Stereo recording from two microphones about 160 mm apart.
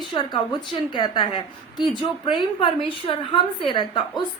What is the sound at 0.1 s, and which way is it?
A woman's voice, 30° left (ahead or behind).